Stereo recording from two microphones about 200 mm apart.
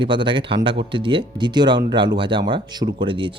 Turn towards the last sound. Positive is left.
turn(degrees=-25)  # may be behind; listen again after turning